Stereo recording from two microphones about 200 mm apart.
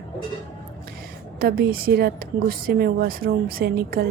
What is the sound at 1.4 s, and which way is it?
Speech, 50° right (ahead or behind).